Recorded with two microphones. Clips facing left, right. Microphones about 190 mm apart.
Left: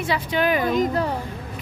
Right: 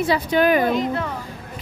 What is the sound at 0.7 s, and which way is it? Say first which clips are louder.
Speech: left 1 dB; 40° left (ahead or behind).